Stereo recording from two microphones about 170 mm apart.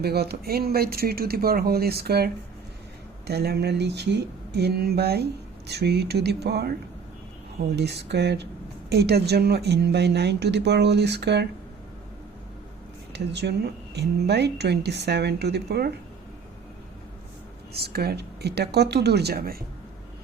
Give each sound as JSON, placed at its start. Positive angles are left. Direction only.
{"t": 0.0, "sound": "speech", "side_deg": -70}
{"t": 7.8, "sound": "speech", "side_deg": -75}
{"t": 13.1, "sound": "speech", "side_deg": -85}
{"t": 17.7, "sound": "speech", "side_deg": -70}